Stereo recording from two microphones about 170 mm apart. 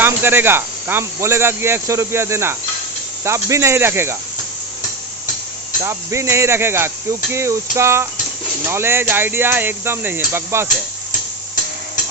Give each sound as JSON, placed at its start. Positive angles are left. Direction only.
{"t": 0.0, "sound": "speech", "side_deg": -10}
{"t": 5.8, "sound": "speech", "side_deg": -15}